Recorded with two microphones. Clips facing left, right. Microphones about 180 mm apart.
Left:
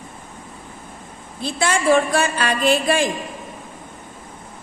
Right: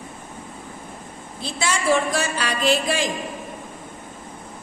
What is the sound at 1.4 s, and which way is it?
A woman's voice, 55° left (ahead or behind).